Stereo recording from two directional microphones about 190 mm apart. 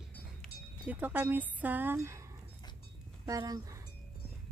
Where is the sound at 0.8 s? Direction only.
10° right (ahead or behind).